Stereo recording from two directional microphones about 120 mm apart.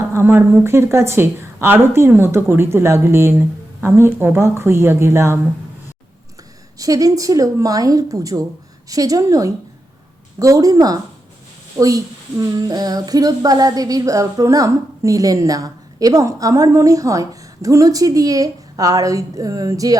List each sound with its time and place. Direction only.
0.1 s speech: 20° right (ahead or behind)
6.7 s a woman's voice: 30° right (ahead or behind)